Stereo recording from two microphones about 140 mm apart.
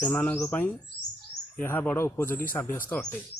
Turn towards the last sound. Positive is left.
turn(degrees=10)  # may be behind; listen again after turning